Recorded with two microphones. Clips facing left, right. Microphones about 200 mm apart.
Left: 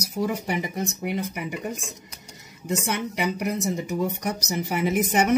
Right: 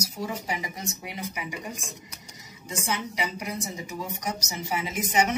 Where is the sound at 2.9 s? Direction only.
60° left (ahead or behind).